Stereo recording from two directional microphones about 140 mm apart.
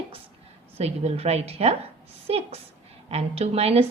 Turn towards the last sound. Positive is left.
turn(degrees=-45)  # may be behind; listen again after turning